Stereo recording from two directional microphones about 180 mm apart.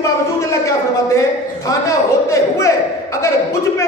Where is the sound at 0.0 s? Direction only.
15° left (ahead or behind).